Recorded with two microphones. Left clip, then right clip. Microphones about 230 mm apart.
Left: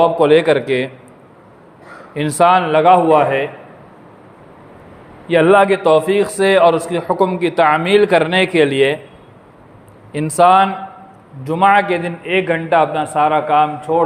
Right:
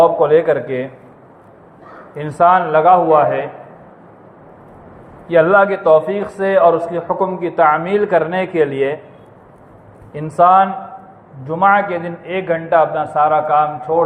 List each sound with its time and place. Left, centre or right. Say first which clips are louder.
0.0 s a man's voice: even; left
2.1 s a man's voice: even; left
5.3 s a man's voice: even; left
10.1 s a man's voice: even; left